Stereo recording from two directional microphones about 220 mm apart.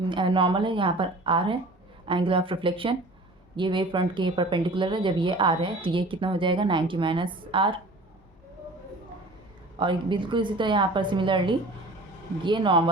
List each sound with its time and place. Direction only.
0.0 s speech: 20° right (ahead or behind)
9.7 s speech: 20° right (ahead or behind)